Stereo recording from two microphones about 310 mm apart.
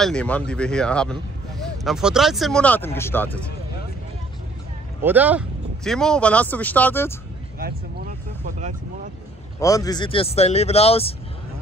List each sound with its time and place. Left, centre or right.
0.0 s speech: centre
5.0 s speech: centre
8.5 s speech: right
9.6 s speech: centre